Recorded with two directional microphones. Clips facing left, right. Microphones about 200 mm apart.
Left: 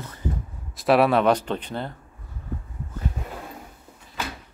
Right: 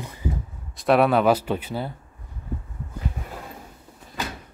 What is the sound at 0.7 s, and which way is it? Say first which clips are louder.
Speech: even; centre (ahead or behind).